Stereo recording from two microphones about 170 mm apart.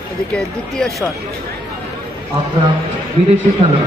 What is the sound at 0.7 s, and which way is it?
Speech, 5° left (ahead or behind).